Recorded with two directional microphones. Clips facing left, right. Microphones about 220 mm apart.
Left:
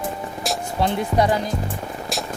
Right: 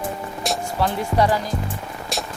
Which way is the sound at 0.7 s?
20° left (ahead or behind).